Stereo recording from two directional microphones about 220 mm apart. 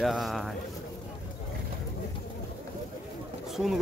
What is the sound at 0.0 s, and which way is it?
Speech, centre (ahead or behind).